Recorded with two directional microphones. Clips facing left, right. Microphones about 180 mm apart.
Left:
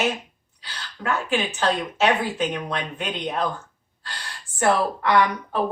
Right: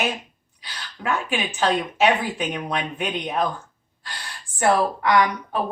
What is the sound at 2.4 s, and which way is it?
Speech, 10° right (ahead or behind).